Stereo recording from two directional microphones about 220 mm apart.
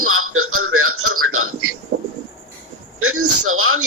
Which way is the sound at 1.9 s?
45° right (ahead or behind).